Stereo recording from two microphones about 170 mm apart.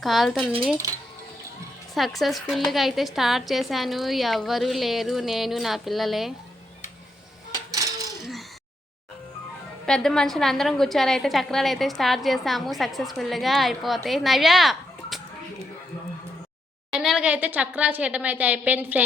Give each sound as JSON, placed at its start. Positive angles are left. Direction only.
{"t": 0.0, "sound": "a woman's voice", "side_deg": 0}
{"t": 2.0, "sound": "a woman's voice", "side_deg": 0}
{"t": 7.7, "sound": "coin", "side_deg": -20}
{"t": 8.2, "sound": "a sound", "side_deg": 0}
{"t": 9.8, "sound": "a woman's voice", "side_deg": 5}
{"t": 16.9, "sound": "a woman's voice", "side_deg": 0}